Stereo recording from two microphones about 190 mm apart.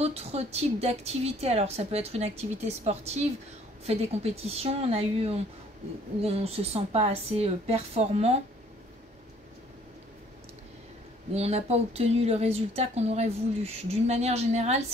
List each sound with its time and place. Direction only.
0.0 s a woman's voice: 35° right (ahead or behind)
11.3 s a woman's voice: 35° right (ahead or behind)